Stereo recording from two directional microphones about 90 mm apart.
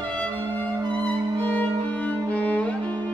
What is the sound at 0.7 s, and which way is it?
Music, 45° right (ahead or behind).